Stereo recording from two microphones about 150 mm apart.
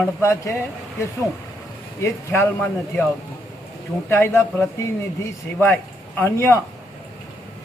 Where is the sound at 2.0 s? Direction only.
15° left (ahead or behind).